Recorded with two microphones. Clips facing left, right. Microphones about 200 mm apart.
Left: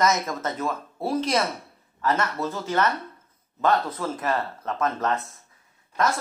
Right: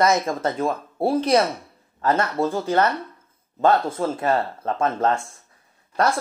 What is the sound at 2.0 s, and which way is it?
Speech, 30° right (ahead or behind).